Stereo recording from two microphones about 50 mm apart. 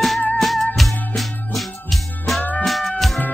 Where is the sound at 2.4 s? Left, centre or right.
Left.